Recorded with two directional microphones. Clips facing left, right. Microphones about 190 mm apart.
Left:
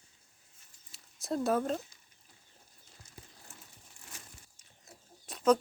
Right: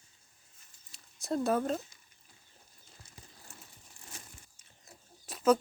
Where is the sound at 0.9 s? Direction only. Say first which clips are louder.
Right 1 dB; centre (ahead or behind).